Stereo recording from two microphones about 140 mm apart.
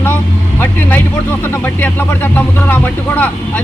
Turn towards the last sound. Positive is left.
turn(degrees=10)  # may be behind; listen again after turning